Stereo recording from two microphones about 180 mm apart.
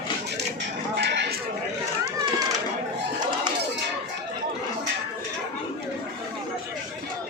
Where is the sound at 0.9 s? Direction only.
70° right (ahead or behind).